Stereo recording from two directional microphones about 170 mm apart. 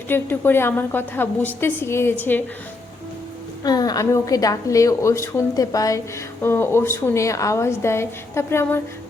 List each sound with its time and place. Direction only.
0.1 s a woman's voice: 10° left (ahead or behind)
3.6 s a woman's voice: 25° left (ahead or behind)